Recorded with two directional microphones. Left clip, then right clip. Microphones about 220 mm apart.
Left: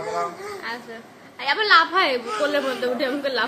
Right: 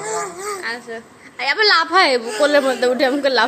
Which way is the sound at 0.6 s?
25° right (ahead or behind).